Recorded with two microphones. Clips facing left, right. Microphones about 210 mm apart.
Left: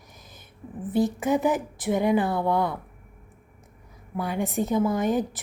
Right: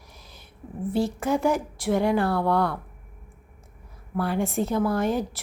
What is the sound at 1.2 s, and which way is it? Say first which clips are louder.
Speech: even; centre (ahead or behind).